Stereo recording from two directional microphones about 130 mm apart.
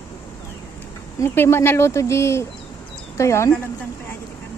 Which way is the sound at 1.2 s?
20° left (ahead or behind).